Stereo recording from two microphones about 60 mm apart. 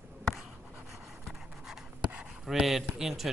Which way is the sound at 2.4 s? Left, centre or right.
Centre.